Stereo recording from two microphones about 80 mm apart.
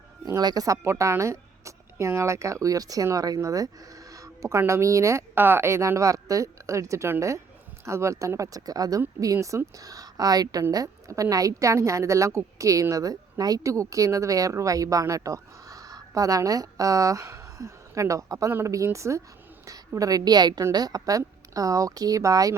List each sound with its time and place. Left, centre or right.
0.3 s a woman's voice: right
5.3 s a woman's voice: right